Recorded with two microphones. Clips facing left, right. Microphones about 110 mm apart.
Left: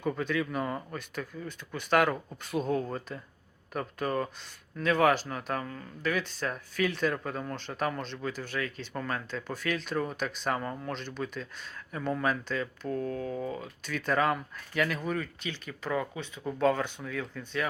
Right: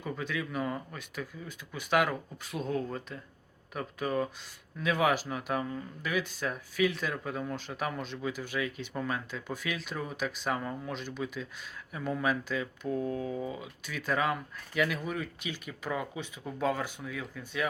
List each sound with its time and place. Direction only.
0.0 s speech: centre (ahead or behind)